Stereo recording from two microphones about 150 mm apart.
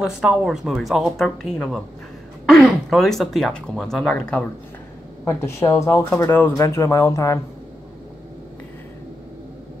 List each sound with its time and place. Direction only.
0.0 s speech: 5° right (ahead or behind); by 7.3 s 20° left (ahead or behind)